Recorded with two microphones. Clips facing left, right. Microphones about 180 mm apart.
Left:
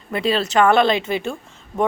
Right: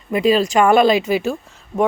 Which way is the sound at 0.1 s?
10° right (ahead or behind).